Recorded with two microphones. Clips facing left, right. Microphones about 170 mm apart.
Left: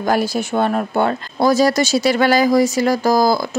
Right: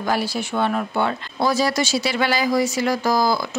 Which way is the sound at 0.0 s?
45° left (ahead or behind).